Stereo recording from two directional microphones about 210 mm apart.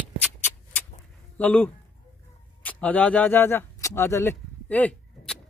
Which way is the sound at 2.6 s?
5° left (ahead or behind).